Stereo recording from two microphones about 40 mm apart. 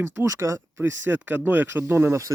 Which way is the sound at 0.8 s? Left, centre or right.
Right.